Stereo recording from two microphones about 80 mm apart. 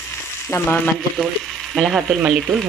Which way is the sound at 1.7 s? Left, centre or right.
Centre.